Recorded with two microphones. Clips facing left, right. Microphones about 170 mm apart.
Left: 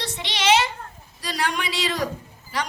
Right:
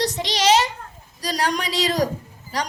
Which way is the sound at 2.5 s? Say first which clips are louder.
Right 2 dB; 40° right (ahead or behind).